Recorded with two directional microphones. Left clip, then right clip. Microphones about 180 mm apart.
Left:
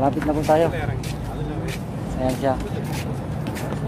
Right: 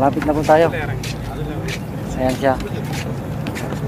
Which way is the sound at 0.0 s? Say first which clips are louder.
Right 4 dB; 5° right (ahead or behind).